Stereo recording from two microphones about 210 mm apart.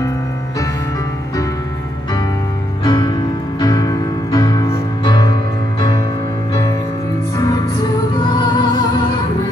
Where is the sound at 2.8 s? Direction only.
25° left (ahead or behind).